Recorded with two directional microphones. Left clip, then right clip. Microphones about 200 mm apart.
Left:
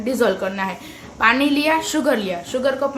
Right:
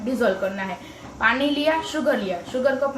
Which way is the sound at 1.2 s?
45° left (ahead or behind).